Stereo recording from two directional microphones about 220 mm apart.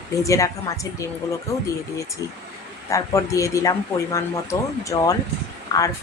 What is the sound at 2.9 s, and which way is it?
Speech, 15° left (ahead or behind).